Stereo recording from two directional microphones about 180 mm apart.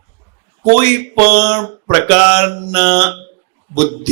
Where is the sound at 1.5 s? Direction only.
15° left (ahead or behind).